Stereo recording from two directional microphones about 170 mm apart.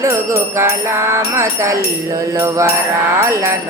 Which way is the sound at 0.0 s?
15° right (ahead or behind).